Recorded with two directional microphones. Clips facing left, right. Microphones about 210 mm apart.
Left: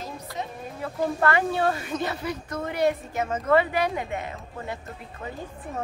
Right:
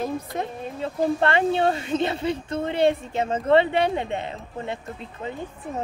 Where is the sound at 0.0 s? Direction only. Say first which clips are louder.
Right 7 dB; 55° right (ahead or behind).